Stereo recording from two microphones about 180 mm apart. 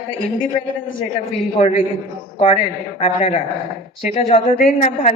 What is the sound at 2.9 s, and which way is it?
A woman's voice, 30° left (ahead or behind).